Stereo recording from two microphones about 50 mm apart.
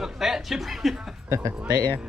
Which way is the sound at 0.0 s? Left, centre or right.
Centre.